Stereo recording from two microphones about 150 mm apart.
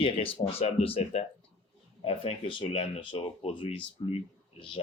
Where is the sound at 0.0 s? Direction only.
40° left (ahead or behind).